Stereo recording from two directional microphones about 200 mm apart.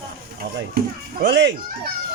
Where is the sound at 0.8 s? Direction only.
50° right (ahead or behind).